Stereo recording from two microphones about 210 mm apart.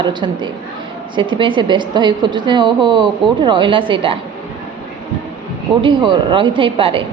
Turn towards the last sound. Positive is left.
turn(degrees=-25)  # may be behind; listen again after turning